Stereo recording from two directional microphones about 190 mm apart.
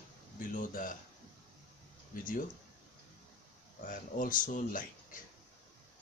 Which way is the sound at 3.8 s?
45° left (ahead or behind).